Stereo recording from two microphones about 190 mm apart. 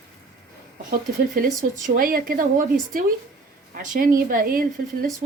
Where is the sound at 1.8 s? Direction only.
50° right (ahead or behind).